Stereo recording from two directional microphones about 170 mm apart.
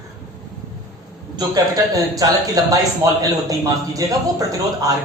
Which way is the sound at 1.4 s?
20° right (ahead or behind).